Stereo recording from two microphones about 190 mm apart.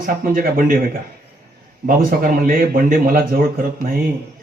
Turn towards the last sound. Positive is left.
turn(degrees=-50)  # may be behind; listen again after turning